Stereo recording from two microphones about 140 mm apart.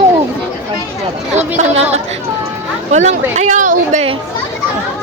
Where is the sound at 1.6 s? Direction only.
50° right (ahead or behind).